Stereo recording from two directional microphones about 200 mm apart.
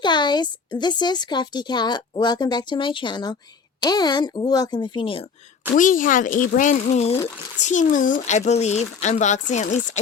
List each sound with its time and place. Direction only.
0.0 s speech: 20° left (ahead or behind)
5.7 s speech: 40° left (ahead or behind)